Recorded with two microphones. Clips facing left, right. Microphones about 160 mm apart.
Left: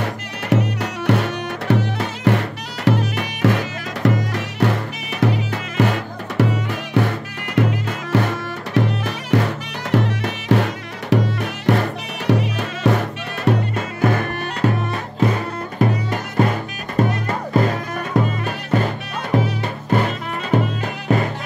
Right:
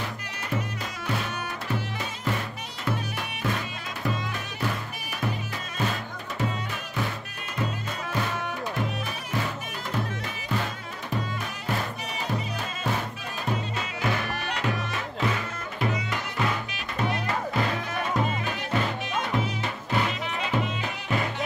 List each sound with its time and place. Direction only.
0.0 s music: 75° left (ahead or behind); by 17.7 s 45° left (ahead or behind)
19.3 s music: 45° left (ahead or behind)